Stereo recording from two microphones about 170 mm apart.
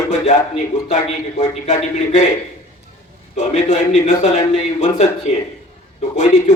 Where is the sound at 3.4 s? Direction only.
45° left (ahead or behind).